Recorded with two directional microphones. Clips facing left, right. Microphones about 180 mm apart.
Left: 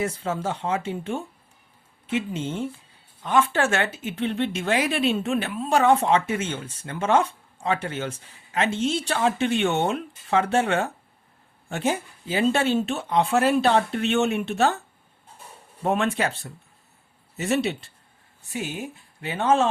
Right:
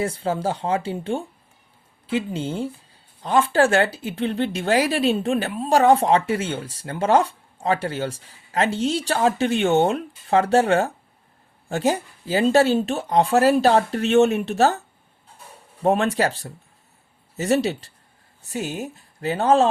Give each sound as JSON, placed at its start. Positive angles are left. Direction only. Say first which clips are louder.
{"t": 0.0, "sound": "speech", "louder": "right 3 dB", "side_deg": -30}
{"t": 15.8, "sound": "speech", "louder": "right 4 dB", "side_deg": -35}